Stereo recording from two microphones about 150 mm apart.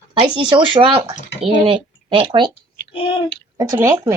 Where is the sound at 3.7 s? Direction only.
20° right (ahead or behind).